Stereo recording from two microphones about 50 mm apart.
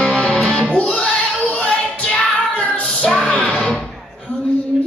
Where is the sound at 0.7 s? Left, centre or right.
Left.